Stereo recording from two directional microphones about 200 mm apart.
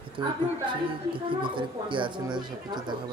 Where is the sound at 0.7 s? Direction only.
25° right (ahead or behind).